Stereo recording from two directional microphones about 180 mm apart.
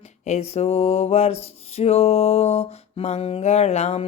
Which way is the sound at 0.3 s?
35° left (ahead or behind).